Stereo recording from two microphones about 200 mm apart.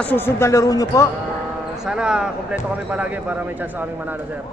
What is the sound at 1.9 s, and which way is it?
Speech, 5° right (ahead or behind).